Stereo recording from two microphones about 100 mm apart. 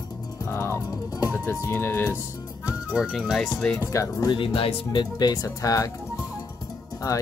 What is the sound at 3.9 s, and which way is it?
Speech, 35° left (ahead or behind).